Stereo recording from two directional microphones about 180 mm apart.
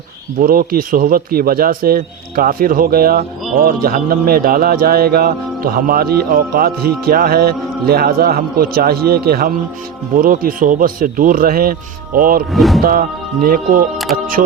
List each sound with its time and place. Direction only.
0.3 s a man's voice: 55° right (ahead or behind)
12.5 s speech: centre (ahead or behind)
12.8 s a man's voice: 55° right (ahead or behind)